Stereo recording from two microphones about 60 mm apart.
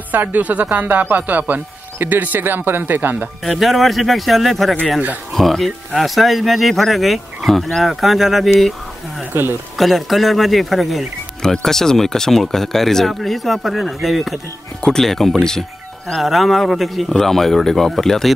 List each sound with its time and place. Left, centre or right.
0.1 s speech: right
3.4 s speech: centre
9.3 s speech: right
9.8 s speech: centre
14.8 s speech: centre